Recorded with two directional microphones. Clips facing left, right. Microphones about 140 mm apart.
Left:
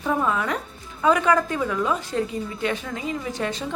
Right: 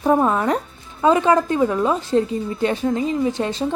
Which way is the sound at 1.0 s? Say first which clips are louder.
Right 4 dB; 30° right (ahead or behind).